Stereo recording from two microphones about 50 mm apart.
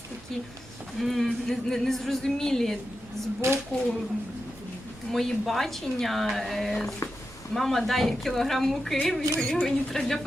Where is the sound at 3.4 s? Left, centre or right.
Right.